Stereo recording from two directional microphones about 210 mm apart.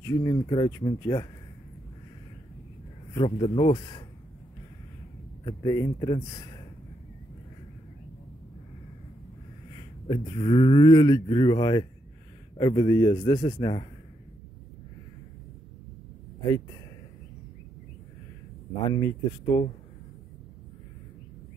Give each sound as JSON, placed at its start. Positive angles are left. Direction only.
{"t": 0.0, "sound": "speech", "side_deg": 15}
{"t": 3.2, "sound": "speech", "side_deg": 25}
{"t": 5.4, "sound": "speech", "side_deg": 20}
{"t": 9.8, "sound": "speech", "side_deg": 25}
{"t": 18.9, "sound": "speech", "side_deg": 15}